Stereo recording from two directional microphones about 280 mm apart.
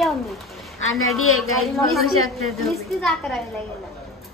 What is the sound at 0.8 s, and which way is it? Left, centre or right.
Speech, left.